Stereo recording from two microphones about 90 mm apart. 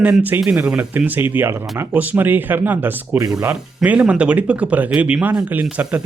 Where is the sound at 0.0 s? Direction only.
15° right (ahead or behind).